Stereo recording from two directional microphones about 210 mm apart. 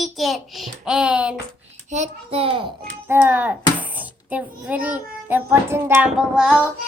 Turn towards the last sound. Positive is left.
turn(degrees=-5)  # may be behind; listen again after turning